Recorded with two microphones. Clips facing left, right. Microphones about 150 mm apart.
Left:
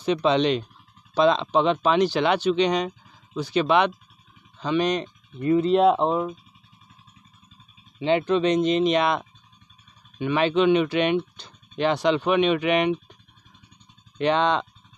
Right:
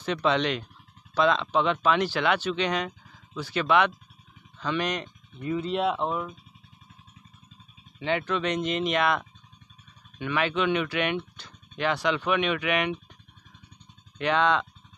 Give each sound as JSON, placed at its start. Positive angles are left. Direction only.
{"t": 0.0, "sound": "speech", "side_deg": 20}
{"t": 5.6, "sound": "speech", "side_deg": 40}
{"t": 8.0, "sound": "speech", "side_deg": 25}
{"t": 14.1, "sound": "speech", "side_deg": 25}